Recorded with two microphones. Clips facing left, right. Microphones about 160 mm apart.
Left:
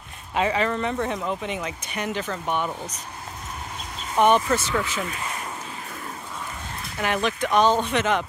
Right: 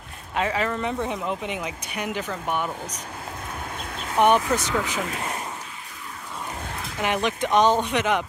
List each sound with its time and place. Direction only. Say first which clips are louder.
0.4 s speech: left 2 dB; centre (ahead or behind)
4.5 s speech: even; 15° right (ahead or behind)
7.0 s speech: even; 15° right (ahead or behind)